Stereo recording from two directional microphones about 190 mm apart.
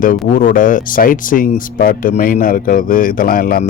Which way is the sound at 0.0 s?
45° left (ahead or behind).